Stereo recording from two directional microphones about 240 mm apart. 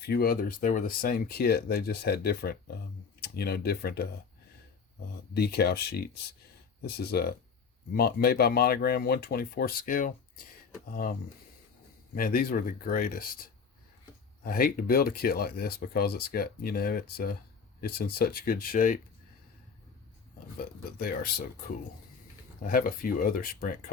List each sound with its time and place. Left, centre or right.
0.1 s speech: left
5.3 s speech: left
12.1 s speech: left
14.4 s speech: left
20.6 s speech: left
22.6 s speech: left